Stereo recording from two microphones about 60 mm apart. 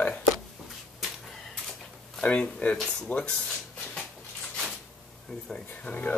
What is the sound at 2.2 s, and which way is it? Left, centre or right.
Speech, left.